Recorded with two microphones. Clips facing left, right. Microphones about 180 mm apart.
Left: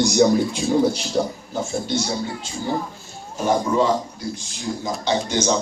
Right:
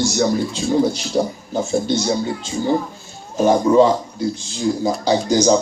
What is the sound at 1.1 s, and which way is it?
Speech, 10° right (ahead or behind).